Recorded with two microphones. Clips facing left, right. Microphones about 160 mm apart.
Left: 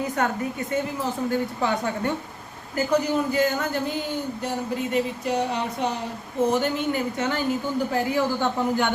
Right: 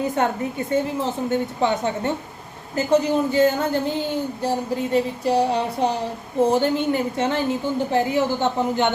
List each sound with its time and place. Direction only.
0.2 s a woman's voice: 25° right (ahead or behind)
4.4 s a sound: 30° right (ahead or behind)
6.5 s a woman's voice: 30° right (ahead or behind)